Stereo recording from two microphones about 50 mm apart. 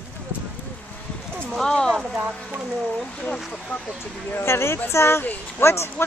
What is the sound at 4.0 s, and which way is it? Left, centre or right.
Speech, left.